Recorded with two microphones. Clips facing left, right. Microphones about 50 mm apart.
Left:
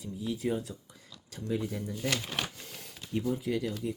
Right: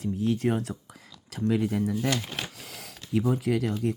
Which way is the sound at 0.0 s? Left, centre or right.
Right.